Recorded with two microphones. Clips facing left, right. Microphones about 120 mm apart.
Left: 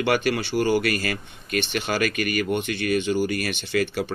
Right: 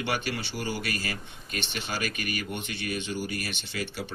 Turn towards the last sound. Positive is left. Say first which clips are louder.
# left 11 dB
turn(degrees=60)  # may be behind; listen again after turning